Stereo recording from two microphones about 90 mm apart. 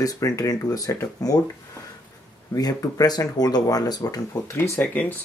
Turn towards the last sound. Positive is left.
turn(degrees=15)  # may be behind; listen again after turning